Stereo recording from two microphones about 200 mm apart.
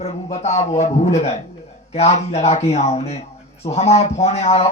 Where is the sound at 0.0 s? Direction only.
35° left (ahead or behind).